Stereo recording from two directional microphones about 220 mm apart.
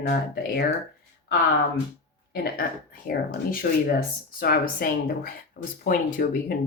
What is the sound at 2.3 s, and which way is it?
Speech, 45° left (ahead or behind).